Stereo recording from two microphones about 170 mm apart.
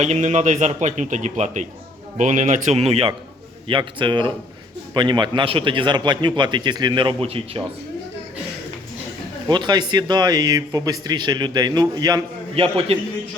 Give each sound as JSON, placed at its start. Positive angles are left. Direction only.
{"t": 0.0, "sound": "a man's voice", "side_deg": -45}
{"t": 9.5, "sound": "speech", "side_deg": -25}